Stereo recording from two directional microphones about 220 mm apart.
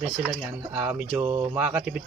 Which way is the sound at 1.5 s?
5° right (ahead or behind).